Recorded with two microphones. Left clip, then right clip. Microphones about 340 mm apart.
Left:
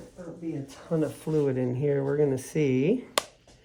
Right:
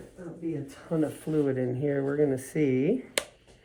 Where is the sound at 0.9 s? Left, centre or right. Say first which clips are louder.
Left 1 dB; left.